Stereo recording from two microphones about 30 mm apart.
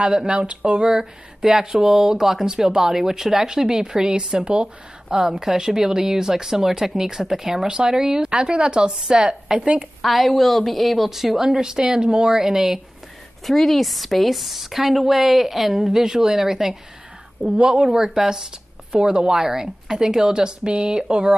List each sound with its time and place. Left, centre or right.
0.3 s a woman's voice: right
0.8 s a woman's voice: right
10.0 s a woman's voice: centre
11.1 s speech: centre
13.5 s a woman's voice: centre
17.6 s speech: right